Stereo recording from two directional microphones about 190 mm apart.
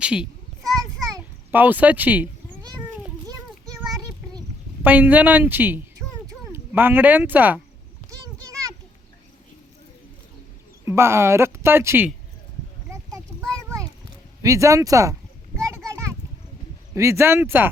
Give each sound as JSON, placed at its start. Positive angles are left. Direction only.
{"t": 0.0, "sound": "a child's voice", "side_deg": -5}
{"t": 0.8, "sound": "children playing", "side_deg": -15}
{"t": 4.8, "sound": "speech", "side_deg": -10}
{"t": 10.8, "sound": "speech", "side_deg": -15}
{"t": 14.4, "sound": "speech", "side_deg": -15}
{"t": 16.9, "sound": "speech", "side_deg": -15}